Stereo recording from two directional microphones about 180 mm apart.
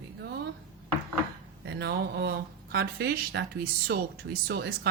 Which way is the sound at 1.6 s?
65° right (ahead or behind).